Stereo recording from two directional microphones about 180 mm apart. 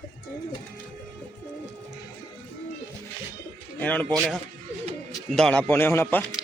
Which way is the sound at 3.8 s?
10° left (ahead or behind).